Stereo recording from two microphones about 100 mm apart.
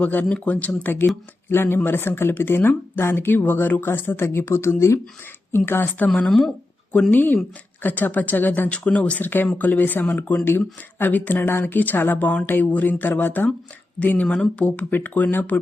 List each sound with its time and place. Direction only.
0.0 s speech: 15° left (ahead or behind)
6.1 s speech: 5° left (ahead or behind)
7.1 s speech: 20° left (ahead or behind)